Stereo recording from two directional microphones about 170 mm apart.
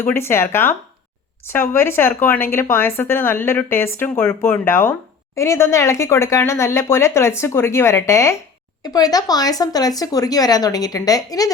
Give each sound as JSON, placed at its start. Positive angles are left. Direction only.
{"t": 0.0, "sound": "speech", "side_deg": 15}